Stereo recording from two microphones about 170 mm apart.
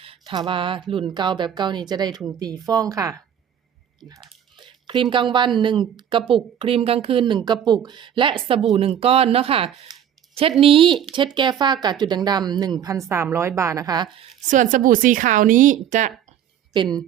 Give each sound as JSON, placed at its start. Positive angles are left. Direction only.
{"t": 0.0, "sound": "a woman's voice", "side_deg": -30}
{"t": 4.1, "sound": "typing", "side_deg": -30}
{"t": 5.5, "sound": "a woman's voice", "side_deg": -30}
{"t": 9.9, "sound": "a sound", "side_deg": -35}
{"t": 10.6, "sound": "a woman's voice", "side_deg": -30}
{"t": 14.5, "sound": "speech", "side_deg": -50}
{"t": 16.7, "sound": "a woman's voice", "side_deg": -25}